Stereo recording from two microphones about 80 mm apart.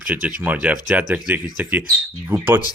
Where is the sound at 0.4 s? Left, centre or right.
Centre.